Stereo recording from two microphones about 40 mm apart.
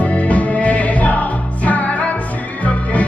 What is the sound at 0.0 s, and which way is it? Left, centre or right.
Music, left.